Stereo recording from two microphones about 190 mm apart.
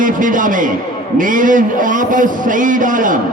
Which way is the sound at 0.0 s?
45° right (ahead or behind).